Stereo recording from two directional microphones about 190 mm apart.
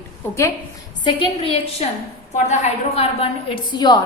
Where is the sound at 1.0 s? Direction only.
30° left (ahead or behind).